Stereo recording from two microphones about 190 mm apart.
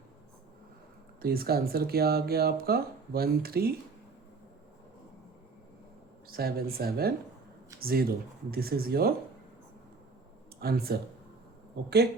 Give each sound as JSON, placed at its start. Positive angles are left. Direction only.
{"t": 1.2, "sound": "speech", "side_deg": -50}
{"t": 6.2, "sound": "speech", "side_deg": -55}
{"t": 10.6, "sound": "speech", "side_deg": -55}